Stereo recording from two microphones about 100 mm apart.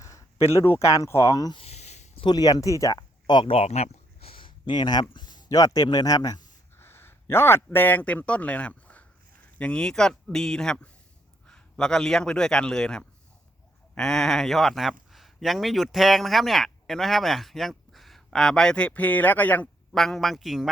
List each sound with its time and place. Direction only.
0.0 s speech: 30° left (ahead or behind)
1.5 s a sound: 90° left
2.2 s speech: 40° left (ahead or behind)
3.2 s speech: 50° left (ahead or behind)
3.5 s a sound: 90° left; by 5.0 s 45° left (ahead or behind)
5.1 s speech: 45° left (ahead or behind)
6.7 s a man's voice: 25° left (ahead or behind)
20.0 s a man's voice: 5° left (ahead or behind)